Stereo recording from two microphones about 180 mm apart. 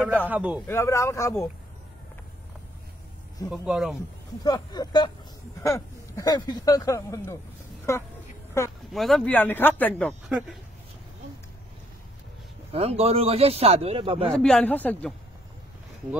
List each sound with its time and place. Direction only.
0.0 s a man's voice: 5° left (ahead or behind)
0.3 s a man's voice: 5° right (ahead or behind)
0.7 s speech: 15° left (ahead or behind)
3.6 s a man's voice: 5° right (ahead or behind)
4.4 s speech: 20° left (ahead or behind)
8.9 s speech: centre (ahead or behind)
12.7 s speech: 35° right (ahead or behind)
14.3 s speech: 5° left (ahead or behind)